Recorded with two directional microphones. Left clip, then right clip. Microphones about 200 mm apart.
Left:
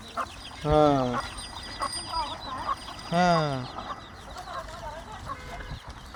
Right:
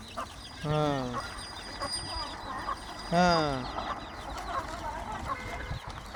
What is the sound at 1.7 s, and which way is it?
Fowl, 10° left (ahead or behind).